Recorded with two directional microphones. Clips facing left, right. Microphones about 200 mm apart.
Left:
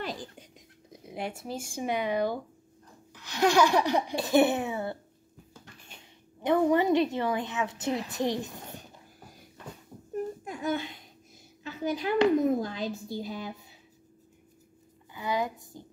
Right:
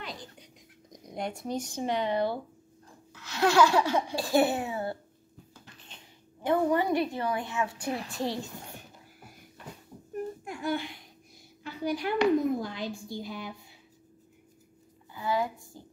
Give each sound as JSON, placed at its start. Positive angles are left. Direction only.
{"t": 0.8, "sound": "a sound", "side_deg": 5}
{"t": 1.4, "sound": "speech", "side_deg": 5}
{"t": 6.4, "sound": "a woman's voice", "side_deg": 20}
{"t": 10.4, "sound": "a child's voice", "side_deg": 20}
{"t": 15.1, "sound": "a woman's voice", "side_deg": 20}